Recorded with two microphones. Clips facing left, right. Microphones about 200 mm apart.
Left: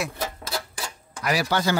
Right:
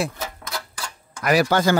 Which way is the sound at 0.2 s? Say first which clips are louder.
Left 2 dB; 30° left (ahead or behind).